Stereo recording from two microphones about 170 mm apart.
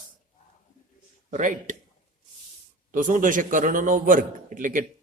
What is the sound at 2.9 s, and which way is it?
A man's voice, 50° right (ahead or behind).